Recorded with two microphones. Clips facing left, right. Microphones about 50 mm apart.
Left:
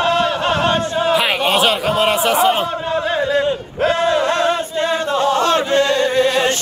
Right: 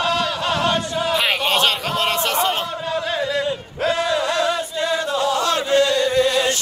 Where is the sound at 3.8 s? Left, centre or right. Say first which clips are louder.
Left 4 dB; left.